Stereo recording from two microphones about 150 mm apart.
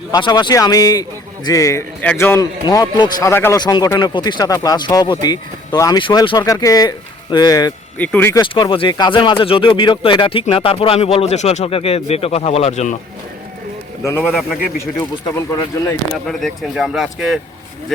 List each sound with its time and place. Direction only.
0.1 s speech: 25° left (ahead or behind)
2.0 s a man's voice: 10° left (ahead or behind)
2.6 s speech: 30° left (ahead or behind)
7.9 s a man's voice: 10° left (ahead or behind)
8.4 s speech: 30° left (ahead or behind); by 13.0 s 50° left (ahead or behind)
14.0 s a man's voice: 15° left (ahead or behind)
16.2 s speech: centre (ahead or behind)